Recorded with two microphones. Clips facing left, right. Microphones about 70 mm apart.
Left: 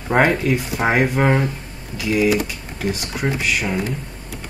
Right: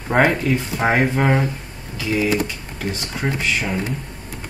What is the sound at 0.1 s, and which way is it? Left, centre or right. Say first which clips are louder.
Speech: even; centre.